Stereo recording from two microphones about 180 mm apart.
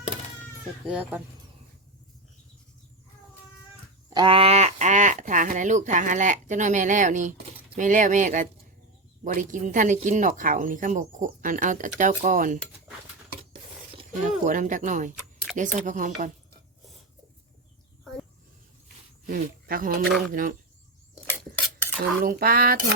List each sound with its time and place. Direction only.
0.9 s speech: 5° right (ahead or behind)
4.1 s speech: 25° right (ahead or behind); by 12.5 s 45° right (ahead or behind)
14.3 s speech: 45° right (ahead or behind)
19.3 s speech: 50° right (ahead or behind)
20.1 s speech: centre (ahead or behind)
20.3 s speech: 50° right (ahead or behind)
22.2 s speech: 55° right (ahead or behind)